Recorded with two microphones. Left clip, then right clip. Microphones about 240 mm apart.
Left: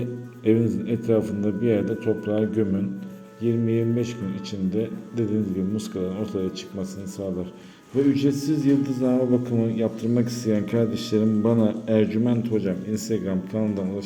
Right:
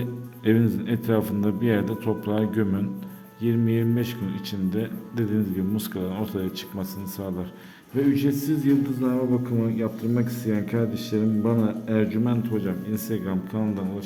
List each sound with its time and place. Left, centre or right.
0.4 s a man's voice: right
8.1 s a man's voice: centre